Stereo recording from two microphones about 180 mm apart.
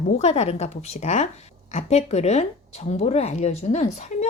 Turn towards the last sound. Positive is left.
turn(degrees=40)  # may be behind; listen again after turning